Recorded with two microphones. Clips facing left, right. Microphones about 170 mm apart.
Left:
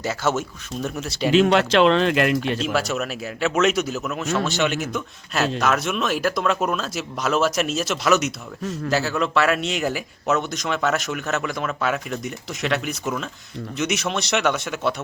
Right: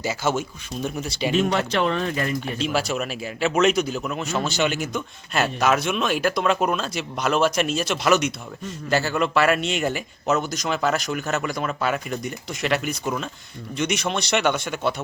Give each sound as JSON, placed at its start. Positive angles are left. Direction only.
{"t": 0.0, "sound": "speech", "side_deg": 0}
{"t": 1.3, "sound": "speech", "side_deg": 90}
{"t": 2.6, "sound": "speech", "side_deg": 0}